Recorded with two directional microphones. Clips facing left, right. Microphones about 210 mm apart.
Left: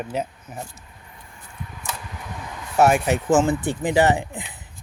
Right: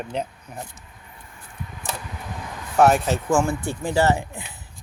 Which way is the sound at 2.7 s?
10° left (ahead or behind).